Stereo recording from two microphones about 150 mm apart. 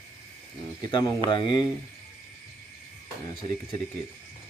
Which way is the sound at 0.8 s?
30° left (ahead or behind).